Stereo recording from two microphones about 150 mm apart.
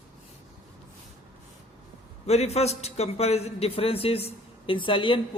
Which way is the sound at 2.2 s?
45° left (ahead or behind).